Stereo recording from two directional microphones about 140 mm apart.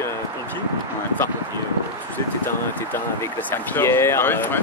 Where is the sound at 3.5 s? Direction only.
15° left (ahead or behind).